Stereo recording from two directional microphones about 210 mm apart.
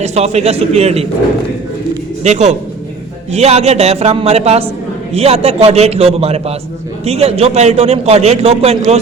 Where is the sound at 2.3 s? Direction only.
35° right (ahead or behind).